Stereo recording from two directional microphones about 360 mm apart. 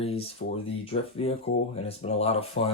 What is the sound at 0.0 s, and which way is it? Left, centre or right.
Speech, centre.